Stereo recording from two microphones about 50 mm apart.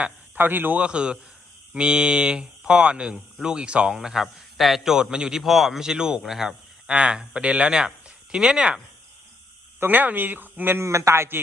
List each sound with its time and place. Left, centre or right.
0.3 s speech: right
0.8 s a man's voice: right
3.9 s speech: centre
9.8 s speech: right
10.8 s a man's voice: right